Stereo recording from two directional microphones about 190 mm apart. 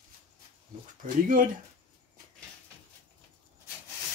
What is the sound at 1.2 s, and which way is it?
Speech, 45° right (ahead or behind).